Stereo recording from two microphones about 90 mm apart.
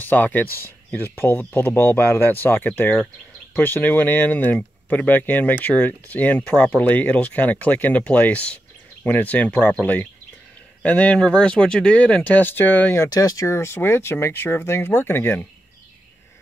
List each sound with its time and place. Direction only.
0.0 s speech: 20° left (ahead or behind)
6.7 s speech: 20° left (ahead or behind); by 13.5 s 40° left (ahead or behind)
13.5 s speech: 30° left (ahead or behind)